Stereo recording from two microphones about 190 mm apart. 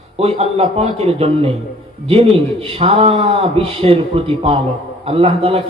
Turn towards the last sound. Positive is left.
turn(degrees=-30)  # may be behind; listen again after turning